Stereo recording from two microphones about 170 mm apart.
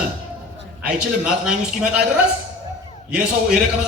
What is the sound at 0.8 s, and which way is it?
A man's voice, 5° right (ahead or behind).